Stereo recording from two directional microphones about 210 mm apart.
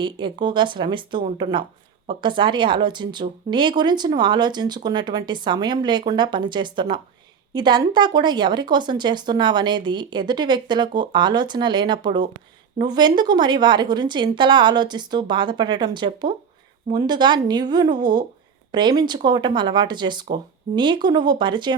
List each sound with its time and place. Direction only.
0.0 s speech: 20° right (ahead or behind)